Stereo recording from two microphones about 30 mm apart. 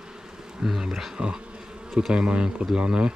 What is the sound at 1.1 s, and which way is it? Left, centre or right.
Speech, right.